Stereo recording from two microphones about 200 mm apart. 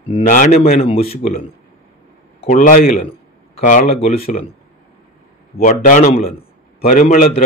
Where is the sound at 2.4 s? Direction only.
40° left (ahead or behind).